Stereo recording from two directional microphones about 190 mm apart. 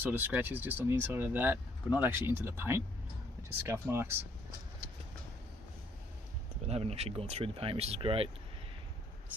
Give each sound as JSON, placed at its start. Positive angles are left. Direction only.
{"t": 0.0, "sound": "speech", "side_deg": -10}
{"t": 6.7, "sound": "speech", "side_deg": -35}